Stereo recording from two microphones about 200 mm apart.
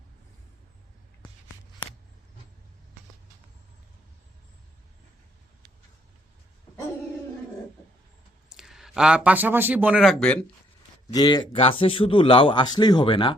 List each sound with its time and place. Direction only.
8.4 s speech: centre (ahead or behind)
11.1 s a man's voice: 20° left (ahead or behind)